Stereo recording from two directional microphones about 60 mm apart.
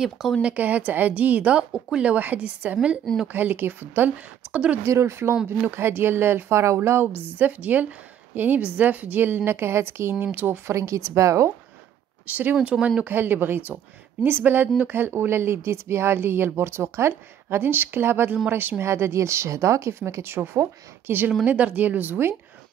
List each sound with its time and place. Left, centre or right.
0.0 s speech: centre
0.4 s a woman's voice: right
1.6 s speech: centre
2.0 s a woman's voice: right
3.3 s speech: right
4.8 s speech: right
5.3 s speech: centre
5.7 s speech: right
7.3 s a woman's voice: right
10.1 s a woman's voice: right
10.7 s speech: right
12.3 s a woman's voice: right
18.9 s speech: right
21.5 s a woman's voice: right